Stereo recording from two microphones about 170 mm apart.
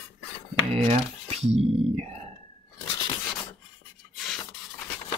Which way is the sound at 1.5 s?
35° right (ahead or behind).